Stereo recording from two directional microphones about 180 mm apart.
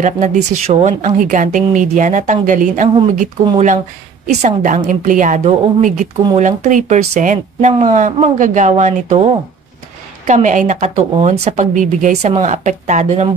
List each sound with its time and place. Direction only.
0.0 s a woman's voice: 45° right (ahead or behind)